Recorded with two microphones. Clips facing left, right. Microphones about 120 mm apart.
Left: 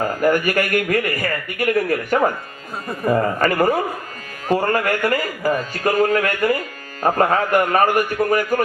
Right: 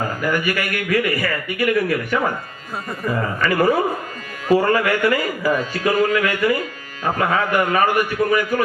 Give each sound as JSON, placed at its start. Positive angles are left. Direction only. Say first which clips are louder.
{"t": 0.2, "sound": "a man's voice", "louder": "left 6 dB", "side_deg": 45}